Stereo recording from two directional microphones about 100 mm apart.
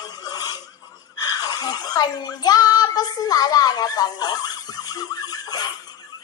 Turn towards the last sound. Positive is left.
turn(degrees=40)  # may be behind; listen again after turning